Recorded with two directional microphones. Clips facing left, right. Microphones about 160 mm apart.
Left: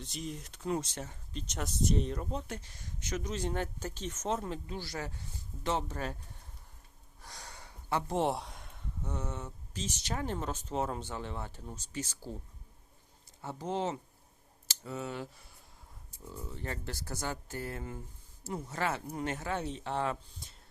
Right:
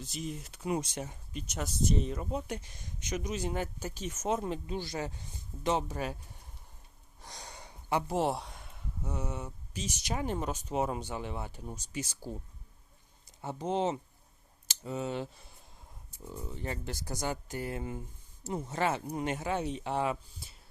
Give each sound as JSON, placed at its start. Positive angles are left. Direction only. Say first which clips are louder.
{"t": 0.0, "sound": "speech", "louder": "right 2 dB", "side_deg": 0}
{"t": 7.2, "sound": "speech", "louder": "right 2 dB", "side_deg": -20}
{"t": 13.4, "sound": "speech", "louder": "right 3 dB", "side_deg": -20}